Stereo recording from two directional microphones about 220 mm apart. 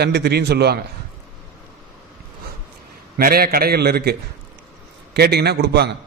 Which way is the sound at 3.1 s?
40° right (ahead or behind).